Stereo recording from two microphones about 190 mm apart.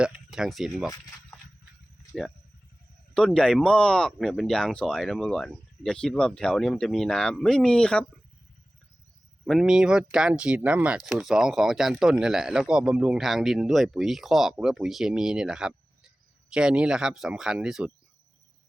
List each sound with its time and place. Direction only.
0.0 s speech: centre (ahead or behind)
3.2 s speech: 5° left (ahead or behind)
9.5 s speech: centre (ahead or behind)